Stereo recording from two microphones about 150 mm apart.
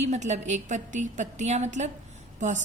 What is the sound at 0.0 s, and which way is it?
A woman's voice, 50° right (ahead or behind).